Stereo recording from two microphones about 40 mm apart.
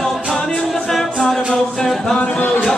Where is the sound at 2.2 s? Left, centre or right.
Left.